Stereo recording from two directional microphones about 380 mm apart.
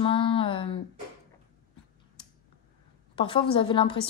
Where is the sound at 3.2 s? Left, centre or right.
Centre.